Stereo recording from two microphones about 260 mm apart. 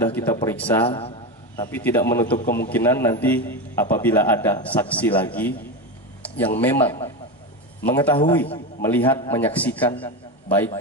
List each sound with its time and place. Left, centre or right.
0.0 s speech: centre
0.8 s a man's voice: left
1.6 s speech: centre
6.2 s a sound: centre
6.6 s a man's voice: centre